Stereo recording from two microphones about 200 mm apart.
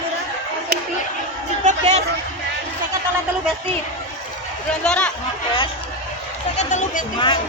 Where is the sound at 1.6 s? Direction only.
35° right (ahead or behind).